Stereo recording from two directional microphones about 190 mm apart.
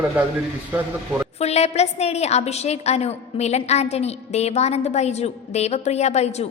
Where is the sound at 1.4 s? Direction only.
35° left (ahead or behind).